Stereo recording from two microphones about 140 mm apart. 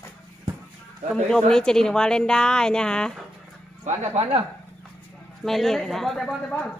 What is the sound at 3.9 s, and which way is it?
Speech, 50° right (ahead or behind).